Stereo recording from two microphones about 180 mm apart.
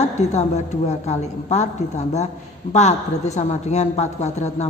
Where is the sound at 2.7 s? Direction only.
40° left (ahead or behind).